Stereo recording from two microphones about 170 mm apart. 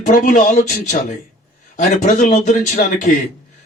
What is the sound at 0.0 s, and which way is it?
A man's voice, 50° left (ahead or behind).